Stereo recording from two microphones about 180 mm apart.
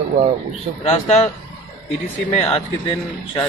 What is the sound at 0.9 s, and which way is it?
Speech, 40° left (ahead or behind).